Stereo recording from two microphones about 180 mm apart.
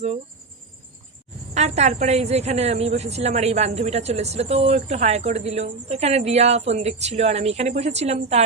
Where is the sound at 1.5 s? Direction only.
40° right (ahead or behind).